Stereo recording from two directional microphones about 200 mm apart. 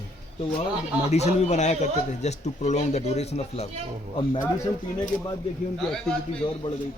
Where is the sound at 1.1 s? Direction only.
35° left (ahead or behind).